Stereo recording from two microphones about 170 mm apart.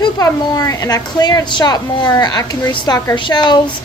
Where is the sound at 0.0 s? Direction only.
20° left (ahead or behind).